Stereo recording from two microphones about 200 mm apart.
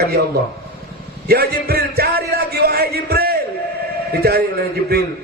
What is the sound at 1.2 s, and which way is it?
Music, 50° right (ahead or behind).